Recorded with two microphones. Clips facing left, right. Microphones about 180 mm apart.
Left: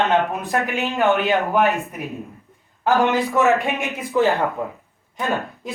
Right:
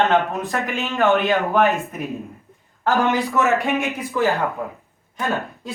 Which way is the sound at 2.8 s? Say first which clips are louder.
Left 1 dB; 15° left (ahead or behind).